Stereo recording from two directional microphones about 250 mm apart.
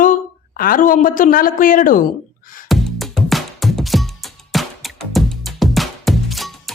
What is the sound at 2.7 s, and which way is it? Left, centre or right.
Music, centre.